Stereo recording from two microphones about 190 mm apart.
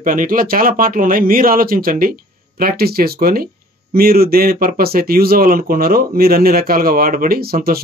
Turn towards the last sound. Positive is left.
turn(degrees=-50)  # may be behind; listen again after turning